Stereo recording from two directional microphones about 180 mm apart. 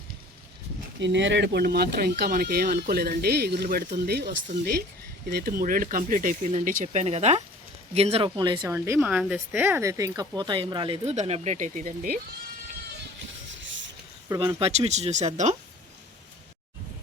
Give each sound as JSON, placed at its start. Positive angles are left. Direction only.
{"t": 0.9, "sound": "speech", "side_deg": -80}
{"t": 5.3, "sound": "speech", "side_deg": -55}
{"t": 8.7, "sound": "speech", "side_deg": -15}
{"t": 14.3, "sound": "speech", "side_deg": -20}
{"t": 14.6, "sound": "speech", "side_deg": -35}